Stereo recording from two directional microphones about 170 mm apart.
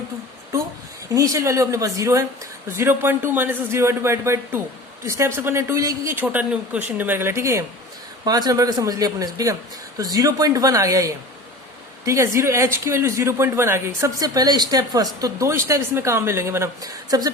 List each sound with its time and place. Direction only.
1.1 s speech: 20° right (ahead or behind)